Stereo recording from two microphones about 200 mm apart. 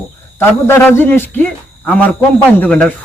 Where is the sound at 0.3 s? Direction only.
10° left (ahead or behind).